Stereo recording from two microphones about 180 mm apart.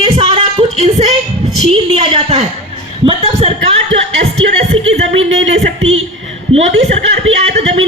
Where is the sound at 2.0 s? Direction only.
35° right (ahead or behind).